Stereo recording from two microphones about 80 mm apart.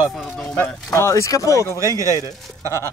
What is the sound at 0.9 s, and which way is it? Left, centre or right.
Speech, left.